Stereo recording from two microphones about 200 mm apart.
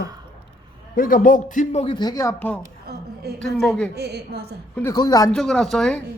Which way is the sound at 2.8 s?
55° right (ahead or behind).